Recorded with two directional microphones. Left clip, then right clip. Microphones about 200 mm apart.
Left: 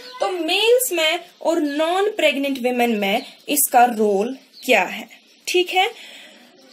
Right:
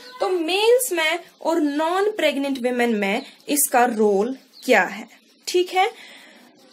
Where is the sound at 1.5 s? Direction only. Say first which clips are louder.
Left 2 dB; 15° right (ahead or behind).